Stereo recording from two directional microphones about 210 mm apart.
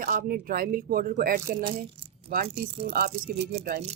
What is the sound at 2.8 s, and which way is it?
Speech, 45° right (ahead or behind).